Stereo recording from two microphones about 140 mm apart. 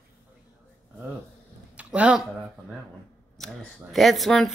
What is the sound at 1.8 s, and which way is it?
Speech, 10° right (ahead or behind).